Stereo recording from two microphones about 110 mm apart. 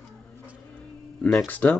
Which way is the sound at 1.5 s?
15° left (ahead or behind).